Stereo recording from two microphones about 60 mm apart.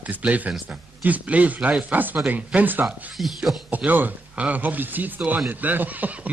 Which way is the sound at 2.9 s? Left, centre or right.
Centre.